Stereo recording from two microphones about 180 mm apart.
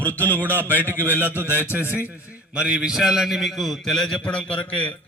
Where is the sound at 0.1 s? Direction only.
10° left (ahead or behind).